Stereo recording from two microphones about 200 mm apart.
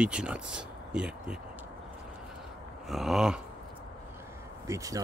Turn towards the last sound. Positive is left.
turn(degrees=-15)  # may be behind; listen again after turning